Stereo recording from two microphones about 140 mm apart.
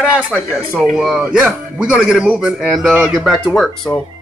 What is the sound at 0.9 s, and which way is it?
A man's voice, 5° right (ahead or behind).